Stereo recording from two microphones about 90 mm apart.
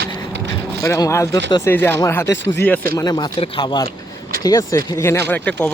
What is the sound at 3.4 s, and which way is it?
Speech, 75° left (ahead or behind).